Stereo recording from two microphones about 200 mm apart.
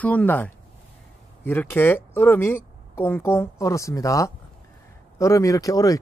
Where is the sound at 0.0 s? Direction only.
5° left (ahead or behind).